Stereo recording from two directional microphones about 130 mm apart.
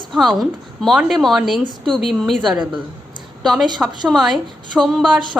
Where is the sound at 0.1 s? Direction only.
Centre (ahead or behind).